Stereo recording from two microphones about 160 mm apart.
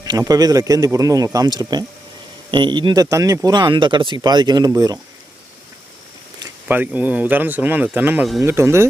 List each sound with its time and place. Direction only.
0.0 s speech: 25° right (ahead or behind)
6.7 s speech: 10° right (ahead or behind)